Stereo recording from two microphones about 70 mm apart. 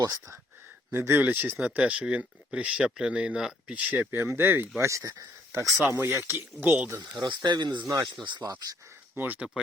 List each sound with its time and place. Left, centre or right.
0.0 s speech: right
0.9 s speech: right
1.7 s speech: centre; by 4.6 s right
4.8 s speech: right
6.0 s speech: right
7.2 s speech: right
9.1 s speech: right